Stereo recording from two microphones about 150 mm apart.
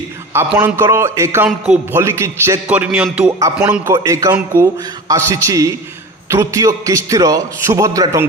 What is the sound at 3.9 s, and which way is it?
A man's voice, 20° right (ahead or behind).